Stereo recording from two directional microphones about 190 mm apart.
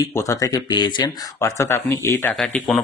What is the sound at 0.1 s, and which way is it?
Speech, 15° left (ahead or behind).